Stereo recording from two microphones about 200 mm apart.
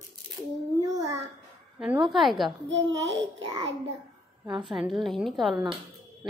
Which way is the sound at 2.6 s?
60° right (ahead or behind).